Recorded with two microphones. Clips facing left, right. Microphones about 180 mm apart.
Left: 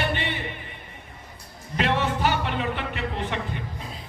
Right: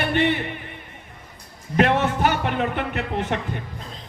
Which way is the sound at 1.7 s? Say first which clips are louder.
Right 5 dB; 55° right (ahead or behind).